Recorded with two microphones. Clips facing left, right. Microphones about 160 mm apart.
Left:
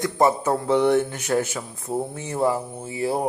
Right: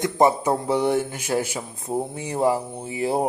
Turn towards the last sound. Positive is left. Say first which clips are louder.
# right 1 dB
turn(degrees=-20)  # may be behind; listen again after turning